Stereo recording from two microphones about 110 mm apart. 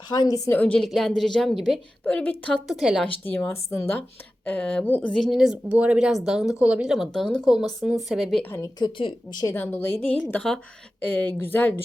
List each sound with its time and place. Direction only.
0.1 s speech: 35° left (ahead or behind)
0.4 s a woman's voice: 15° left (ahead or behind)
0.8 s speech: centre (ahead or behind)
2.0 s a woman's voice: 15° left (ahead or behind)
2.6 s speech: 5° right (ahead or behind)
3.2 s speech: 20° left (ahead or behind)
4.4 s a woman's voice: 10° left (ahead or behind)
5.1 s speech: centre (ahead or behind)
8.4 s speech: 20° left (ahead or behind)
8.8 s speech: 45° left (ahead or behind)
9.5 s a woman's voice: 20° left (ahead or behind)